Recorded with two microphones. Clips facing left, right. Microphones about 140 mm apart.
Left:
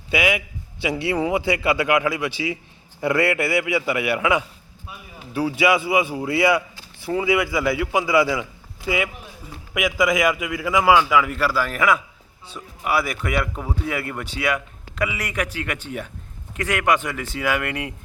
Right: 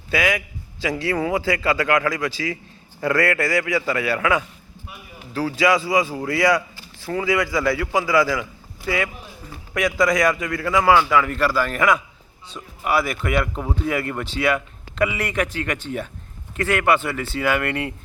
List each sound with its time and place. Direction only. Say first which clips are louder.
0.1 s a man's voice: even; 15° left (ahead or behind)
9.7 s a man's voice: right 1 dB; 5° left (ahead or behind)